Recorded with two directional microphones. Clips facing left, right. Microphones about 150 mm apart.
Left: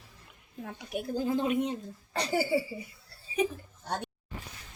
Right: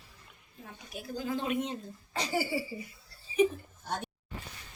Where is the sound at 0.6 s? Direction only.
60° left (ahead or behind).